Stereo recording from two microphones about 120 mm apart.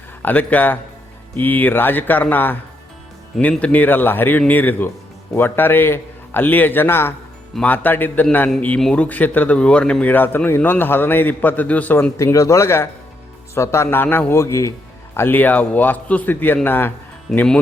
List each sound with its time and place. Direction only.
0.2 s a man's voice: 15° left (ahead or behind)